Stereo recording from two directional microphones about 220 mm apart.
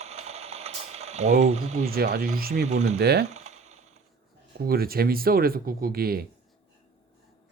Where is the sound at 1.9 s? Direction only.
45° right (ahead or behind).